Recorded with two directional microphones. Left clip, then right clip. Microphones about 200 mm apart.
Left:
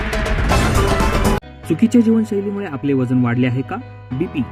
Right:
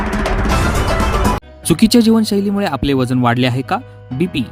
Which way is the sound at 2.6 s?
70° right (ahead or behind).